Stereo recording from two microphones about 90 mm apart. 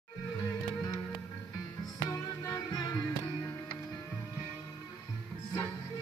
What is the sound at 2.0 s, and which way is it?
Music, 45° left (ahead or behind).